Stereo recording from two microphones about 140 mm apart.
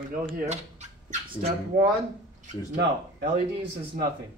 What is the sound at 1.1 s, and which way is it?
Speech, 50° right (ahead or behind).